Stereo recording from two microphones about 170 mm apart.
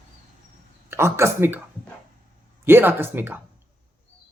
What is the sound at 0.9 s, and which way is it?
Speech, 15° right (ahead or behind).